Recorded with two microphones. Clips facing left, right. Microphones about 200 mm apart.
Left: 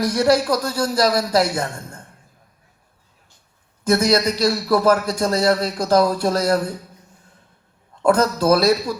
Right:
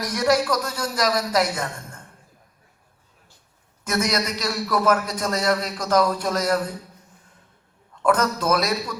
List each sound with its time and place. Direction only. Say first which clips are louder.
0.0 s a man's voice: left 4 dB; 30° left (ahead or behind)
3.8 s a man's voice: left 7 dB; 30° left (ahead or behind)
8.0 s a man's voice: left 4 dB; 30° left (ahead or behind)